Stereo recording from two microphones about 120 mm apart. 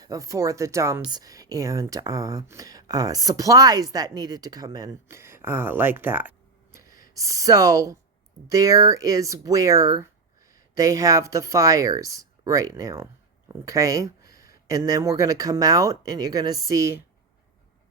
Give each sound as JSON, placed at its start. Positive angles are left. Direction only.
{"t": 0.0, "sound": "speech", "side_deg": -30}
{"t": 6.7, "sound": "speech", "side_deg": -25}